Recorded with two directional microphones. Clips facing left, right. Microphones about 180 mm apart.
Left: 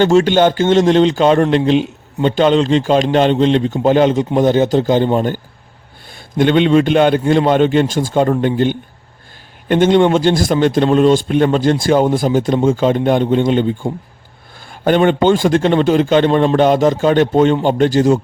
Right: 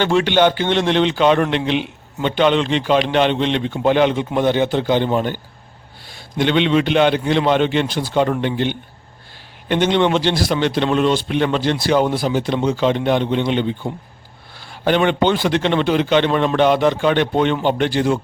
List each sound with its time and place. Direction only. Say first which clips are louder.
0.0 s a man's voice: left 4 dB; 40° left (ahead or behind)